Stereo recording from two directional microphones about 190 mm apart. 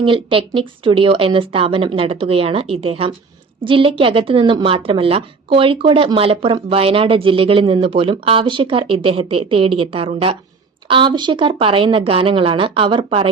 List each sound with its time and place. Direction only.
0.0 s a woman's voice: 25° right (ahead or behind)